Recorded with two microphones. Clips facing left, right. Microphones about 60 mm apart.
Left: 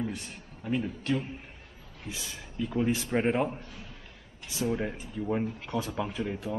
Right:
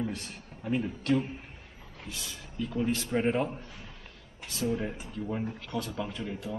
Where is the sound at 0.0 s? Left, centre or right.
Centre.